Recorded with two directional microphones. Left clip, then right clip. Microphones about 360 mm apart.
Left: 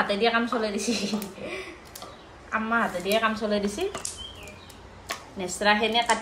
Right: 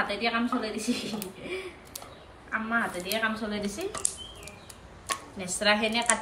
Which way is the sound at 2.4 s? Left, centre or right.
Left.